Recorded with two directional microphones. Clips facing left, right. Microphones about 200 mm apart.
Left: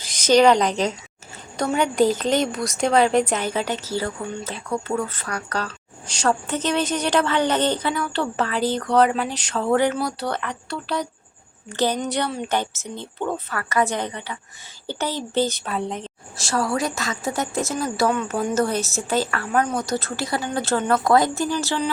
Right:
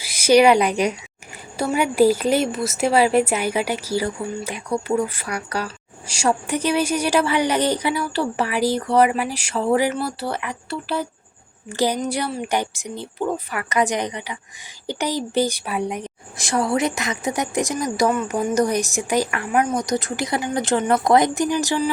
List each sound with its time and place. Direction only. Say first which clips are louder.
0.0 s a woman's voice: right 1 dB; 10° right (ahead or behind)